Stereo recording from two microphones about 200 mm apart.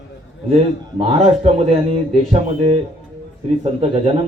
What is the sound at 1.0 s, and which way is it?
A man's voice, 30° right (ahead or behind).